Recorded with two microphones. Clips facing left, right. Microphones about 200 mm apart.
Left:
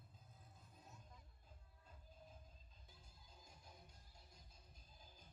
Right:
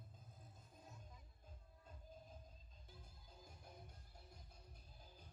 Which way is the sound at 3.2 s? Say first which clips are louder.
Right 3 dB; 55° right (ahead or behind).